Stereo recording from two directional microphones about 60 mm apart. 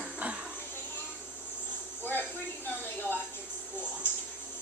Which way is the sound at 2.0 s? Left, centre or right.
Left.